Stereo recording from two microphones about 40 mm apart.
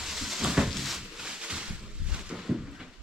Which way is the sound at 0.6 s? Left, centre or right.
Centre.